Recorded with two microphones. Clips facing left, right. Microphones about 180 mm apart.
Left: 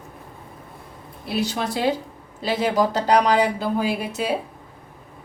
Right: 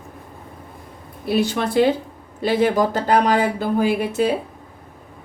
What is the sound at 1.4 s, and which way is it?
A woman's voice, 55° right (ahead or behind).